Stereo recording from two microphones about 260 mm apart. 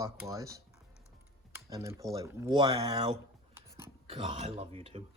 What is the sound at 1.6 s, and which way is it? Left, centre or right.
Speech, centre.